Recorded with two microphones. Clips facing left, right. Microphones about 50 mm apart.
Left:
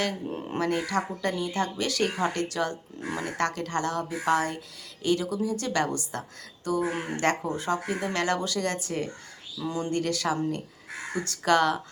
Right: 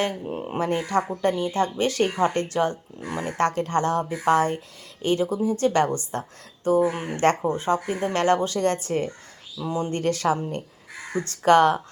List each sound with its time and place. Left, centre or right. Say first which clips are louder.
0.3 s speech: right 3 dB; centre; by 9.0 s right
9.6 s speech: right 4 dB; right
9.9 s speech: right 5 dB; right